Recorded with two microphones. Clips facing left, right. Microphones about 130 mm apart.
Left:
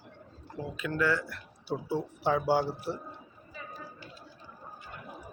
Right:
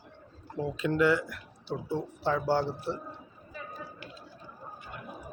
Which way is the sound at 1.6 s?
5° left (ahead or behind).